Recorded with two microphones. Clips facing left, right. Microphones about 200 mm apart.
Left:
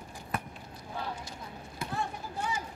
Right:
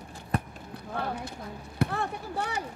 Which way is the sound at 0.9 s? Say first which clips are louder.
Right 5 dB; 60° right (ahead or behind).